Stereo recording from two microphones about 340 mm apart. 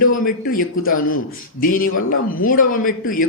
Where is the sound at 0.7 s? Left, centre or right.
Left.